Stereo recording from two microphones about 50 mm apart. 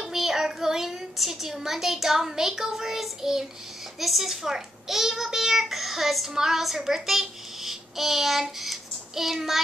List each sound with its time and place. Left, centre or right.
0.0 s a child's voice: centre